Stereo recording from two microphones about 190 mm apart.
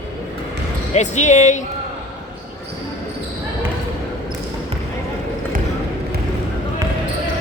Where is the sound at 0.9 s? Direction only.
40° left (ahead or behind).